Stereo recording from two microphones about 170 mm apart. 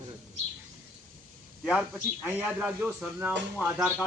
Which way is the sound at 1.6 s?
5° right (ahead or behind).